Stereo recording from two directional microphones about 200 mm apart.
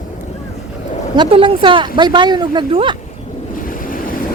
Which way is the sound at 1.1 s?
25° right (ahead or behind).